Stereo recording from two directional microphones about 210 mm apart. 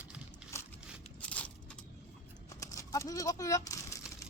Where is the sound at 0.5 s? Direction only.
15° left (ahead or behind).